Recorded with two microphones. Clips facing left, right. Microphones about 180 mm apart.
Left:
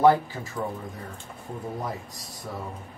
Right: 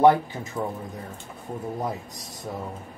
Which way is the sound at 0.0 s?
20° right (ahead or behind).